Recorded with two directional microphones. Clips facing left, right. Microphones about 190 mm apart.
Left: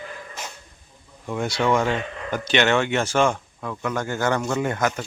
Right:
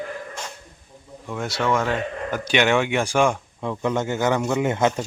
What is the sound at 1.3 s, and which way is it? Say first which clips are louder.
Speech: left 2 dB; centre (ahead or behind).